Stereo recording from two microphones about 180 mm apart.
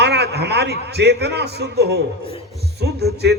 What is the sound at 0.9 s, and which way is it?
A man's voice, 65° right (ahead or behind).